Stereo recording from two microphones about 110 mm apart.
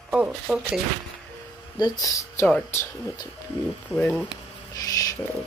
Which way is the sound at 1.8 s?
35° left (ahead or behind).